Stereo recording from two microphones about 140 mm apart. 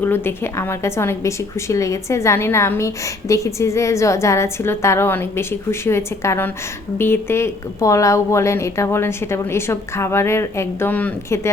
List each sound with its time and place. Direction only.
0.0 s a woman's voice: 15° left (ahead or behind)